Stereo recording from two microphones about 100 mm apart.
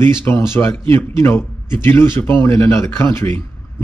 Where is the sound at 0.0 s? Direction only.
25° left (ahead or behind).